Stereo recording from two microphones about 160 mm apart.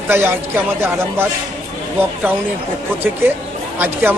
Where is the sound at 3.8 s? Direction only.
10° right (ahead or behind).